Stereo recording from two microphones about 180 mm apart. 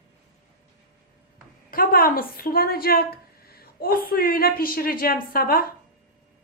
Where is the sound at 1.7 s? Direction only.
55° left (ahead or behind).